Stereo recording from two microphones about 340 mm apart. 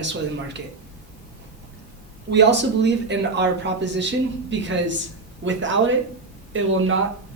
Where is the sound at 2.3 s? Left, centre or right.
Right.